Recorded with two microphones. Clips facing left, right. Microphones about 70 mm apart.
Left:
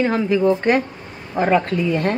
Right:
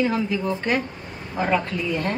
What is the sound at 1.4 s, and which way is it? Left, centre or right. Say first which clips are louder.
Speech: left 6 dB; left.